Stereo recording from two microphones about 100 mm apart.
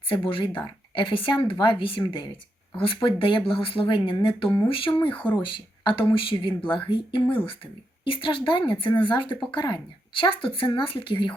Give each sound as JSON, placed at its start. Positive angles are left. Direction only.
{"t": 0.1, "sound": "speech", "side_deg": 60}